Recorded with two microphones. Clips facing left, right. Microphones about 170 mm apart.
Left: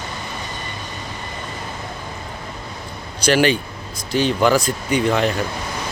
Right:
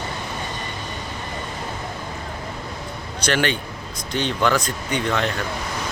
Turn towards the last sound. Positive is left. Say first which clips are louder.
# left 5 dB
turn(degrees=10)  # may be behind; listen again after turning